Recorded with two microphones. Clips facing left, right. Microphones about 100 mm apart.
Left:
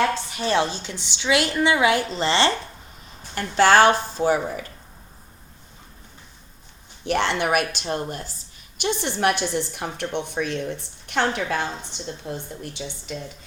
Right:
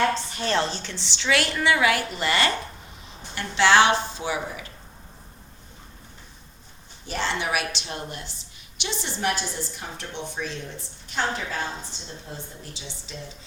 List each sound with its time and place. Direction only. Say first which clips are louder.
0.1 s a woman's voice: left 2 dB; 15° left (ahead or behind)
3.3 s a woman's voice: left 3 dB; 45° left (ahead or behind)
7.0 s a woman's voice: left 6 dB; 65° left (ahead or behind)